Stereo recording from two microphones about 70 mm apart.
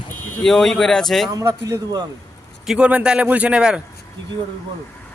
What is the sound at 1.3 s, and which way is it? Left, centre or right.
Speech, right.